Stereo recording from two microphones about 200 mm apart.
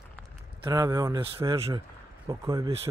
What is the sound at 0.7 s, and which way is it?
Speech, 15° right (ahead or behind).